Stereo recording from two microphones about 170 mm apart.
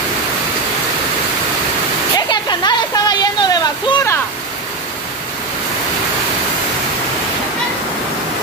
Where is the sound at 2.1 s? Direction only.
25° left (ahead or behind).